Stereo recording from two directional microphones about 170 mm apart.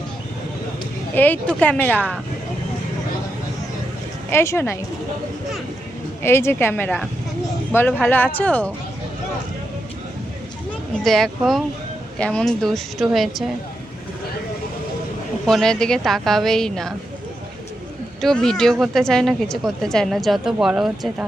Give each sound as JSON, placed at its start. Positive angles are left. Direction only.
{"t": 1.1, "sound": "speech", "side_deg": 10}
{"t": 4.3, "sound": "speech", "side_deg": 15}
{"t": 6.2, "sound": "speech", "side_deg": 15}
{"t": 11.0, "sound": "speech", "side_deg": 0}
{"t": 15.4, "sound": "speech", "side_deg": 5}
{"t": 18.2, "sound": "speech", "side_deg": 5}